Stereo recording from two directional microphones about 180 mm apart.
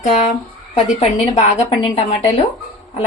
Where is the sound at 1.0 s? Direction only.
35° left (ahead or behind).